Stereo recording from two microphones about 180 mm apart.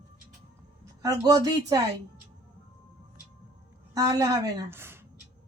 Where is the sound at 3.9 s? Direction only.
20° right (ahead or behind).